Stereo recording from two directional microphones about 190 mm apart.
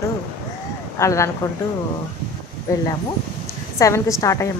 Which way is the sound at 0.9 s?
15° left (ahead or behind).